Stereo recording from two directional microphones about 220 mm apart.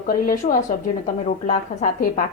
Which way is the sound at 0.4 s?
30° left (ahead or behind).